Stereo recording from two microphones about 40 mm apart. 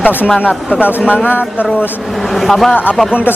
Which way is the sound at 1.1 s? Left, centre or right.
Left.